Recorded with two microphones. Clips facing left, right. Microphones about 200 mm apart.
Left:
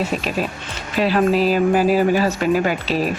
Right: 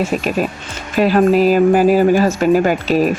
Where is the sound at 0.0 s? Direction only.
50° right (ahead or behind).